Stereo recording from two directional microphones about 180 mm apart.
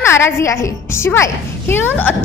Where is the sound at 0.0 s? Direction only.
15° left (ahead or behind).